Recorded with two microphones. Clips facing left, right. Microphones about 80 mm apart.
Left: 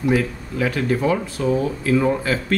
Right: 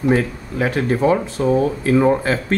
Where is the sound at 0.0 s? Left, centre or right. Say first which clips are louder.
Right 2 dB; right.